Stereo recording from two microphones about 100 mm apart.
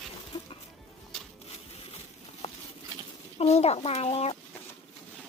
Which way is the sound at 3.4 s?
90° left.